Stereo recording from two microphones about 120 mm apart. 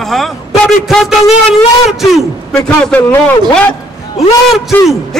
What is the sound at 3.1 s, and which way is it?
Speech, 15° left (ahead or behind).